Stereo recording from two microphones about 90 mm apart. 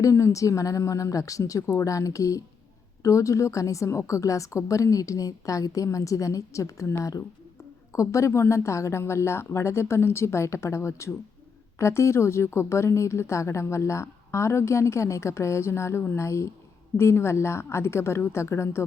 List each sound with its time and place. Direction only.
0.0 s a woman's voice: 35° left (ahead or behind)